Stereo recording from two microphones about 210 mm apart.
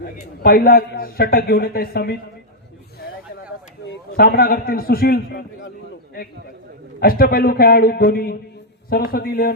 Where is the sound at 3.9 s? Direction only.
45° left (ahead or behind).